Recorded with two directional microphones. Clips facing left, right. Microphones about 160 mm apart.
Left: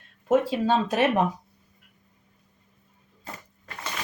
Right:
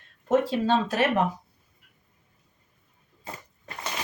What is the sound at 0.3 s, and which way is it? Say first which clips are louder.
Speech: left 1 dB; 15° left (ahead or behind).